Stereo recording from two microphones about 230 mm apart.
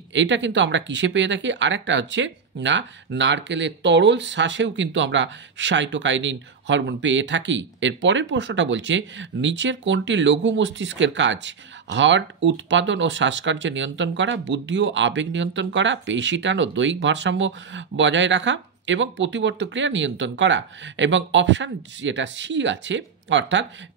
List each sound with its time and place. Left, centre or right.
0.1 s speech: right